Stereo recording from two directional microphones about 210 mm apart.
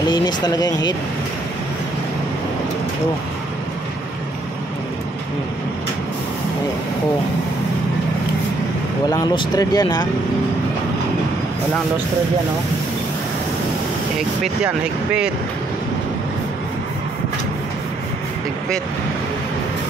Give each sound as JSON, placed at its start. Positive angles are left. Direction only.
{"t": 0.1, "sound": "speech", "side_deg": 20}
{"t": 9.1, "sound": "speech", "side_deg": 20}